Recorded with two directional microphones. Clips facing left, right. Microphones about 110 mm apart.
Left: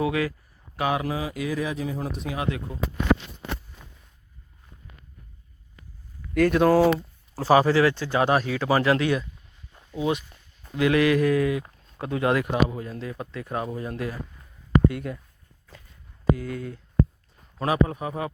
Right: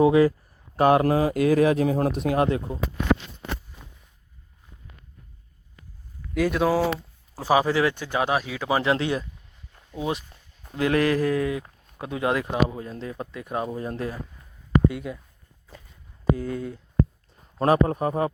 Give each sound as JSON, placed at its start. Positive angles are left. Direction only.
{"t": 0.0, "sound": "speech", "side_deg": -30}
{"t": 0.8, "sound": "a man's voice", "side_deg": -50}
{"t": 2.7, "sound": "speech", "side_deg": -25}
{"t": 6.3, "sound": "speech", "side_deg": 0}
{"t": 7.3, "sound": "speech", "side_deg": -10}
{"t": 8.2, "sound": "speech", "side_deg": -5}
{"t": 10.0, "sound": "a sound", "side_deg": -35}
{"t": 11.9, "sound": "speech", "side_deg": -15}
{"t": 14.8, "sound": "speech", "side_deg": -5}
{"t": 16.3, "sound": "speech", "side_deg": -25}
{"t": 17.6, "sound": "a sound", "side_deg": -40}